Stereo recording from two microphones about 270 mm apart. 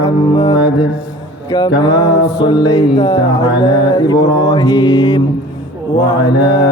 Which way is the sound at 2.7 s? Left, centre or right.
Centre.